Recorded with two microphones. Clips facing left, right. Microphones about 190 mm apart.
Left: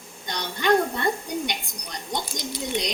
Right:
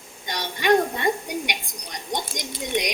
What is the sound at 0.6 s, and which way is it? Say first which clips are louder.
A woman's voice: right 1 dB; 15° right (ahead or behind).